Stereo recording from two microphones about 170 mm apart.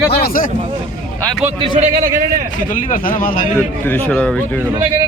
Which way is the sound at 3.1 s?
55° left (ahead or behind).